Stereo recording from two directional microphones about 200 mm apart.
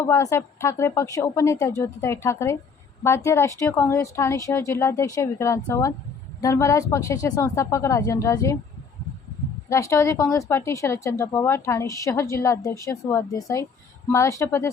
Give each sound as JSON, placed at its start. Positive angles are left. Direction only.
{"t": 0.0, "sound": "a woman's voice", "side_deg": 15}
{"t": 9.6, "sound": "a woman's voice", "side_deg": 15}